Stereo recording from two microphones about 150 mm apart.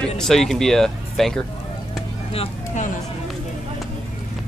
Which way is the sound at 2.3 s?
55° left (ahead or behind).